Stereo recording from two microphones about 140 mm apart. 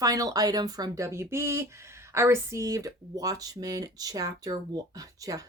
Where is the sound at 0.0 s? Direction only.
25° right (ahead or behind).